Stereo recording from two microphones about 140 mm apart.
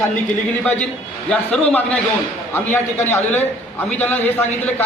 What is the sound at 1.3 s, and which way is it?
A man's voice, 5° left (ahead or behind).